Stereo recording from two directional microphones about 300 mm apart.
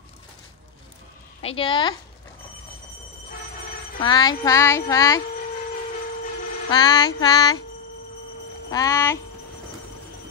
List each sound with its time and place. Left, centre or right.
1.4 s child singing: centre
4.0 s child singing: centre
6.7 s child singing: centre
8.6 s child singing: centre